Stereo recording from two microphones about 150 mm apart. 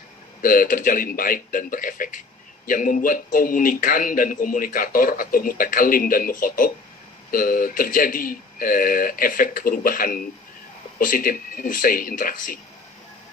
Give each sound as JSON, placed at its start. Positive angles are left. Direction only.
{"t": 0.4, "sound": "a man's voice", "side_deg": 70}